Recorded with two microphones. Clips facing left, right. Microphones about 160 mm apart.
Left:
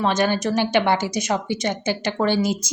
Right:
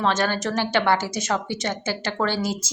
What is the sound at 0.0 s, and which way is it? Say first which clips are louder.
A woman's voice: left 3 dB; 15° left (ahead or behind).